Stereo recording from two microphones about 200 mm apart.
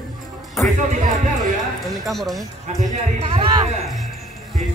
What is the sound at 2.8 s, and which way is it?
A man's voice, 30° right (ahead or behind).